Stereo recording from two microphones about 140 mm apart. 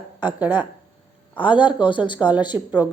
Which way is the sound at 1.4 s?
35° left (ahead or behind).